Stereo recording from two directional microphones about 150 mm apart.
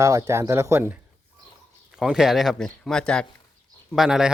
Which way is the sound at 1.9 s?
5° right (ahead or behind).